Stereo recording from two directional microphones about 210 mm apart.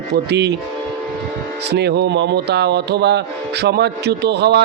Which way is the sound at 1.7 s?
50° right (ahead or behind).